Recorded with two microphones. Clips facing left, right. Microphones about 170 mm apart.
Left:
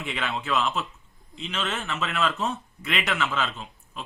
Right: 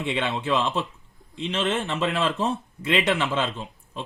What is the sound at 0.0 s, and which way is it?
Speech, 25° right (ahead or behind).